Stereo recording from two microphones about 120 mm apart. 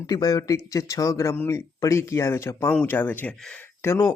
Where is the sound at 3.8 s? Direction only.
25° left (ahead or behind).